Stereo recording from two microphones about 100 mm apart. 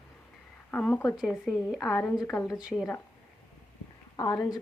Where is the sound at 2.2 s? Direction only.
15° left (ahead or behind).